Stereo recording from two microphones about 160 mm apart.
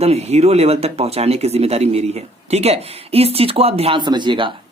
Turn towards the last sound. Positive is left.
turn(degrees=-30)  # may be behind; listen again after turning